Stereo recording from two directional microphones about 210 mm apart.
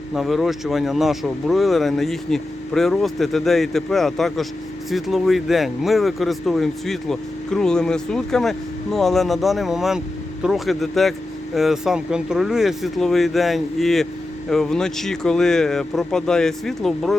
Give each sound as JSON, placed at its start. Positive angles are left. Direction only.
{"t": 0.1, "sound": "speech", "side_deg": 0}